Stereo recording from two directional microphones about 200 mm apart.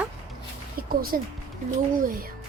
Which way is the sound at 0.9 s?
45° right (ahead or behind).